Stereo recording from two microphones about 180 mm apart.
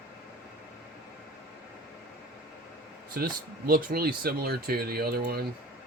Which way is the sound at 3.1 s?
55° right (ahead or behind).